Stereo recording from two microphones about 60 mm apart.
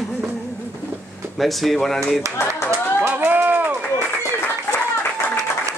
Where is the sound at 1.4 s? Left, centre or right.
Centre.